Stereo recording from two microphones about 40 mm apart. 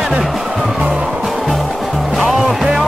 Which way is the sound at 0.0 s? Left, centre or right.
Centre.